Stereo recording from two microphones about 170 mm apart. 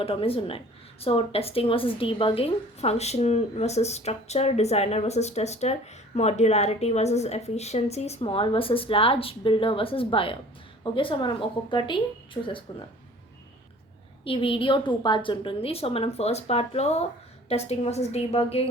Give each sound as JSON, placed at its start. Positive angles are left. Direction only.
{"t": 0.0, "sound": "a woman's voice", "side_deg": 35}
{"t": 14.3, "sound": "a woman's voice", "side_deg": 30}